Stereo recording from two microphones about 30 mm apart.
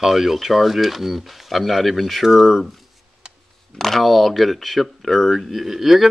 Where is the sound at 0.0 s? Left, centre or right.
Centre.